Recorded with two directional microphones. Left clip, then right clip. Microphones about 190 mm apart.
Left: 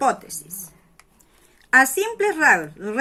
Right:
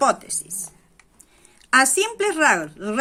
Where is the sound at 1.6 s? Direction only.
25° right (ahead or behind).